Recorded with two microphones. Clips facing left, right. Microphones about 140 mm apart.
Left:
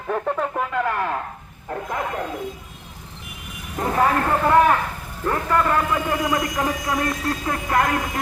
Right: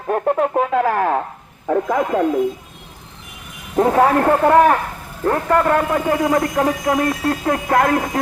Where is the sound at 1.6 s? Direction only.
90° right.